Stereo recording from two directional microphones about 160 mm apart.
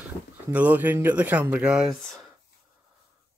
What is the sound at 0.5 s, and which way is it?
Speech, 10° right (ahead or behind).